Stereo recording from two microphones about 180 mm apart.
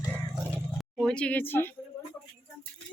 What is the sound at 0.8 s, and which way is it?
Speech, centre (ahead or behind).